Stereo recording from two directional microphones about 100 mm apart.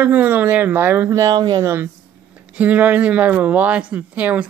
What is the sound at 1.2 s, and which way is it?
Speech, 45° right (ahead or behind).